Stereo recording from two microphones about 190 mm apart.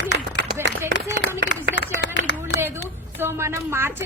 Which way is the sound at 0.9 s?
65° left (ahead or behind).